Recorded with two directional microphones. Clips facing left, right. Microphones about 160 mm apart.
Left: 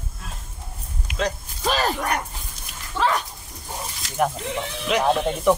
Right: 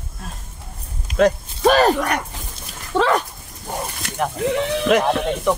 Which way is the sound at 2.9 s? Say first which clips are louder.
Right 5 dB; 60° right (ahead or behind).